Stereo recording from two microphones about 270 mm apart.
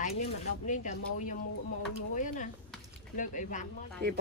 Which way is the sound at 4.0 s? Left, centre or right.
Right.